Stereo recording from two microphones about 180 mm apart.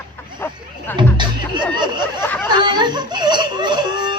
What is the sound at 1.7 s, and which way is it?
Snicker, 25° right (ahead or behind).